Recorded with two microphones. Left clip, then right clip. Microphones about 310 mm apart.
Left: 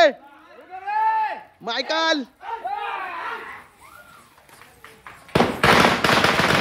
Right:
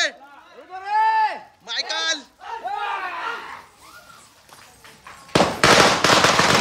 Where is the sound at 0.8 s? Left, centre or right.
Right.